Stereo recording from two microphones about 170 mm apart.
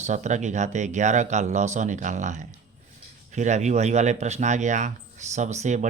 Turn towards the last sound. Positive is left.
turn(degrees=-45)  # may be behind; listen again after turning